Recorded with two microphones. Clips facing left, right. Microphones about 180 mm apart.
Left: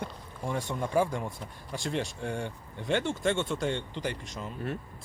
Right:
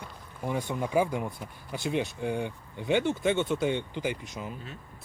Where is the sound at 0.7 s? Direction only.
5° right (ahead or behind).